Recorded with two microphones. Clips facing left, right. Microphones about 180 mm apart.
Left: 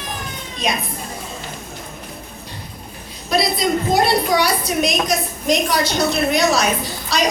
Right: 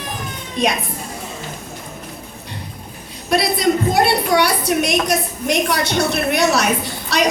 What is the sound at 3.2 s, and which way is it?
A woman's voice, 65° right (ahead or behind).